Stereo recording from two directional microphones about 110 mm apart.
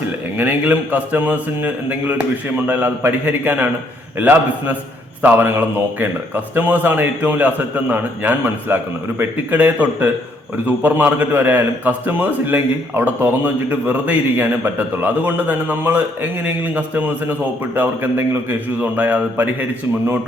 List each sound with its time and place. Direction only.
0.3 s a man's voice: 15° right (ahead or behind)
18.8 s a man's voice: 15° right (ahead or behind)